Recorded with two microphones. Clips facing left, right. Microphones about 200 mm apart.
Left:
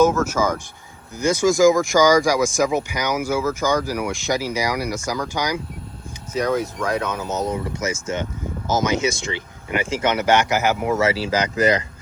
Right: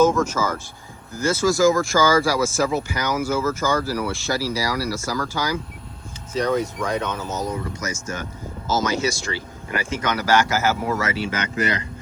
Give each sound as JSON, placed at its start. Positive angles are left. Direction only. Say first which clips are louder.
{"t": 0.3, "sound": "speech", "louder": "left 3 dB", "side_deg": 15}
{"t": 6.3, "sound": "speech", "louder": "even", "side_deg": 5}
{"t": 7.3, "sound": "speech", "louder": "left 3 dB", "side_deg": 25}
{"t": 11.0, "sound": "speech", "louder": "left 5 dB", "side_deg": 35}